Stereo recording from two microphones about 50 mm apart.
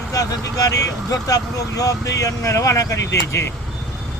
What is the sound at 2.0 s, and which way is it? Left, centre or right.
Speech, left.